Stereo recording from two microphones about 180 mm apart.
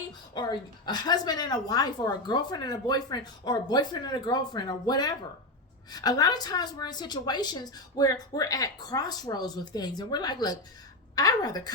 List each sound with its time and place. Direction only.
0.4 s a woman's voice: 25° left (ahead or behind)